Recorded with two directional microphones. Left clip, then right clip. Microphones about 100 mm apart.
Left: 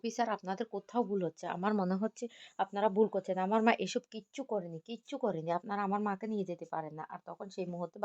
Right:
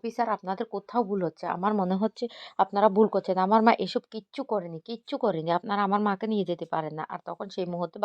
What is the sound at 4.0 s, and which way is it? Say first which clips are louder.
Speech: right 7 dB; 20° right (ahead or behind).